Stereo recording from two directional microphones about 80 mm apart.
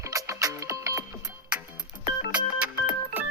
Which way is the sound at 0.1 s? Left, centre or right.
Right.